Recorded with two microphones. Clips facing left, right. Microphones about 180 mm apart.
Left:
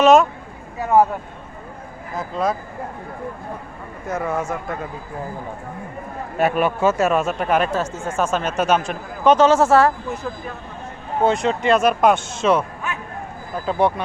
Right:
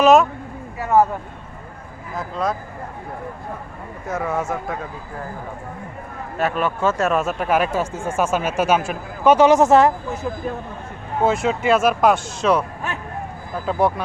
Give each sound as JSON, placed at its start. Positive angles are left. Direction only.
{"t": 0.0, "sound": "speech", "side_deg": 0}
{"t": 0.8, "sound": "speech", "side_deg": 15}
{"t": 2.1, "sound": "speech", "side_deg": 0}
{"t": 4.0, "sound": "speech", "side_deg": 0}
{"t": 6.3, "sound": "speech", "side_deg": 10}
{"t": 11.2, "sound": "speech", "side_deg": 0}
{"t": 13.7, "sound": "speech", "side_deg": 0}